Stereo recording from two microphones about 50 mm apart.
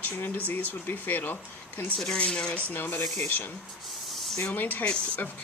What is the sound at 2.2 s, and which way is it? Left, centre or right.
Speech, left.